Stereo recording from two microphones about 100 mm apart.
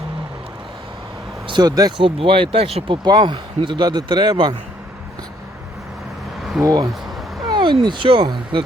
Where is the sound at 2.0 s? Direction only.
60° right (ahead or behind).